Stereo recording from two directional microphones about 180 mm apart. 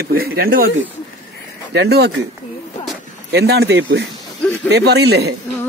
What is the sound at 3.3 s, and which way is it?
Speech, 65° right (ahead or behind).